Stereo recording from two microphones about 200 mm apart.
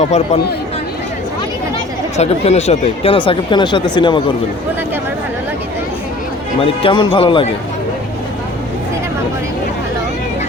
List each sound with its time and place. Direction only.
2.1 s speech: 30° left (ahead or behind)
6.8 s speech: 25° left (ahead or behind)